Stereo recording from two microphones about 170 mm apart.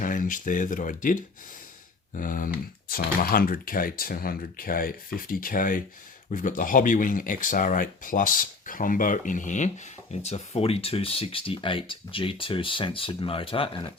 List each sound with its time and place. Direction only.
0.0 s speech: 55° left (ahead or behind); by 13.9 s 30° left (ahead or behind)